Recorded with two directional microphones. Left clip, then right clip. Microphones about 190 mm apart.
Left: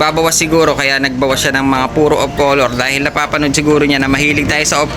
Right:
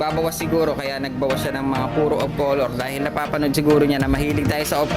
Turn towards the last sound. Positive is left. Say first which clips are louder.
# left 8 dB
turn(degrees=-20)  # may be behind; listen again after turning